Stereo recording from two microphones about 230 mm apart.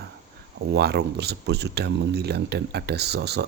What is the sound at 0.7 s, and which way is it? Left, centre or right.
Speech, right.